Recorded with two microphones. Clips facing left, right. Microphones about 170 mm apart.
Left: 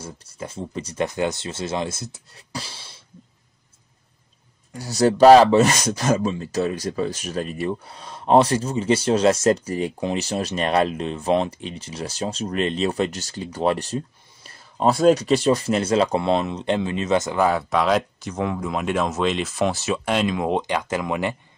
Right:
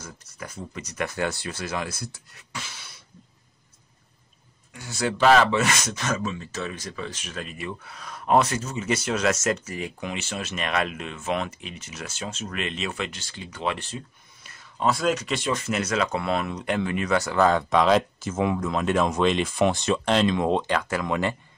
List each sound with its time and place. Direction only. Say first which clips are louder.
0.0 s speech: left 5 dB; 30° left (ahead or behind)
4.7 s speech: left 9 dB; 40° left (ahead or behind); by 18.6 s 5° right (ahead or behind)
18.6 s speech: even; 10° left (ahead or behind)